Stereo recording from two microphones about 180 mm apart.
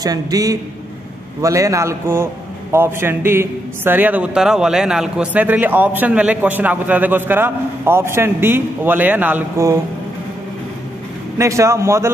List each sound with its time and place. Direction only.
0.0 s a man's voice: 20° right (ahead or behind)
11.3 s a man's voice: 15° right (ahead or behind)